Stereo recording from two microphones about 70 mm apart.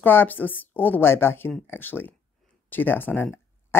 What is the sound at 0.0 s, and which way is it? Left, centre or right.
Speech, left.